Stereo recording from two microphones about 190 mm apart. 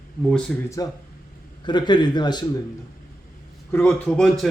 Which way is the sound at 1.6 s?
25° left (ahead or behind).